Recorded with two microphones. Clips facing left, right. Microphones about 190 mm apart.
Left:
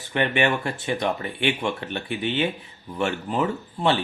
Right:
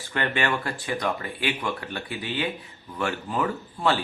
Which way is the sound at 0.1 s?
20° left (ahead or behind).